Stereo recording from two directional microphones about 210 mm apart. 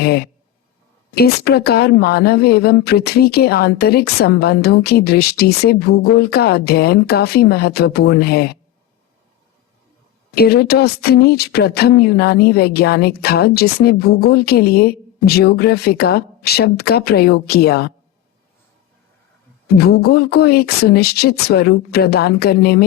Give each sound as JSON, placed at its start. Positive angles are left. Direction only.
{"t": 0.0, "sound": "speech", "side_deg": 50}
{"t": 10.3, "sound": "speech", "side_deg": 50}
{"t": 19.7, "sound": "speech", "side_deg": 50}